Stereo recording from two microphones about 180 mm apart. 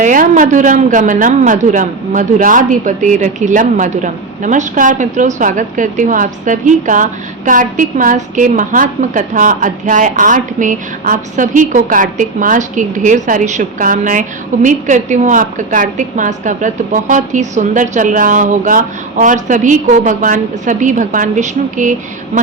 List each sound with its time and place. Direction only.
0.0 s a woman's voice: 45° right (ahead or behind)